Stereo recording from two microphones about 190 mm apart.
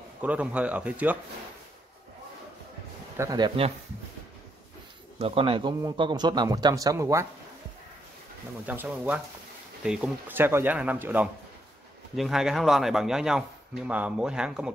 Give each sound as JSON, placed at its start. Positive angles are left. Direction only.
{"t": 0.2, "sound": "speech", "side_deg": -10}
{"t": 3.2, "sound": "a man's voice", "side_deg": -20}
{"t": 5.2, "sound": "a man's voice", "side_deg": -30}
{"t": 8.6, "sound": "a man's voice", "side_deg": -10}